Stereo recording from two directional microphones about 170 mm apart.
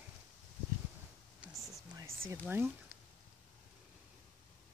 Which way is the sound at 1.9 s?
15° right (ahead or behind).